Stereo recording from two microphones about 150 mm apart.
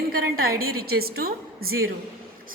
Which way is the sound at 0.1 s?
80° right.